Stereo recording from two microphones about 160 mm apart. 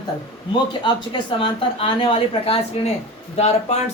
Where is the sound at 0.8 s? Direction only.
30° left (ahead or behind).